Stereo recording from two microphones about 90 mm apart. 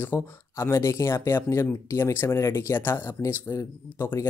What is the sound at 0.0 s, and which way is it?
Speech, 30° left (ahead or behind).